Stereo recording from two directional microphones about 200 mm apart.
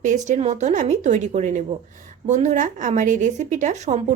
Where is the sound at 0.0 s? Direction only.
40° right (ahead or behind).